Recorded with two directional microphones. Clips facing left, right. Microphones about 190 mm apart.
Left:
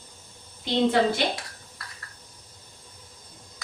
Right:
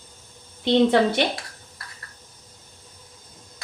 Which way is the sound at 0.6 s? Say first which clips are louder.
Right 4 dB; 70° right (ahead or behind).